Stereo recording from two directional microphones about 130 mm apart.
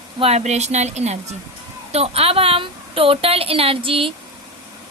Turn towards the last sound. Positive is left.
turn(degrees=-45)  # may be behind; listen again after turning